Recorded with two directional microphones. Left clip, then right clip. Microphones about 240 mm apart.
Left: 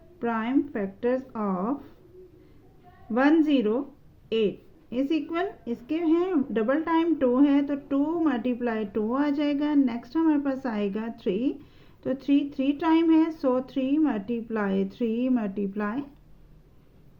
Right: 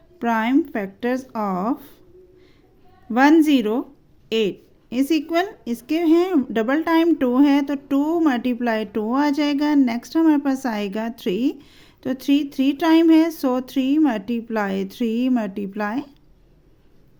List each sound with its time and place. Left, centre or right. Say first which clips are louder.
0.2 s speech: right 7 dB; right
3.1 s a woman's voice: right 7 dB; right